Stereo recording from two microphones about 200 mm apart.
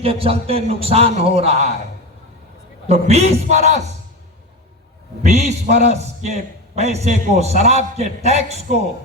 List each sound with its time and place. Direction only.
0.0 s a man's voice: 30° right (ahead or behind)
2.9 s a man's voice: 30° right (ahead or behind)
5.2 s a man's voice: 35° right (ahead or behind)